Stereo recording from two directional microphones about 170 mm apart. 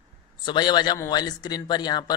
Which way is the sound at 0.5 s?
25° left (ahead or behind).